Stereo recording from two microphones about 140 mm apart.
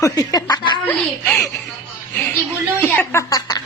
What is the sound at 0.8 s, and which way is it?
A woman's voice, 10° left (ahead or behind).